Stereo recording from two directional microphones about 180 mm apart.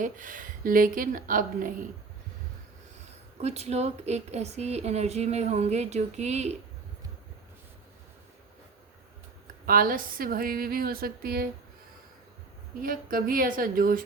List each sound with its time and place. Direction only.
0.0 s speech: 45° right (ahead or behind)
3.4 s a woman's voice: 35° right (ahead or behind)
9.6 s speech: 50° right (ahead or behind)
12.8 s speech: 50° right (ahead or behind)